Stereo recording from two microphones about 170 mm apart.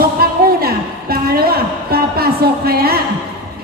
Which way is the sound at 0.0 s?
65° right (ahead or behind).